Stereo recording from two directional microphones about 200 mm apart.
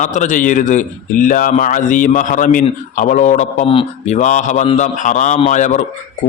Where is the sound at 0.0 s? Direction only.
40° left (ahead or behind).